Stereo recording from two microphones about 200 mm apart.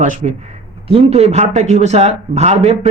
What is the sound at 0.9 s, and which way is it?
Speech, 30° right (ahead or behind).